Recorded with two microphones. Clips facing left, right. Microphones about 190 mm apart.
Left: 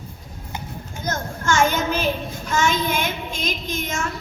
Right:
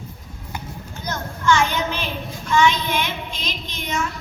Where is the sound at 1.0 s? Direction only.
45° left (ahead or behind).